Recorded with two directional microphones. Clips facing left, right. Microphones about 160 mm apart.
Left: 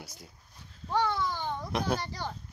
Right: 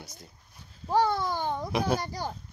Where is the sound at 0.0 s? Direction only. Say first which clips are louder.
Even; 10° left (ahead or behind).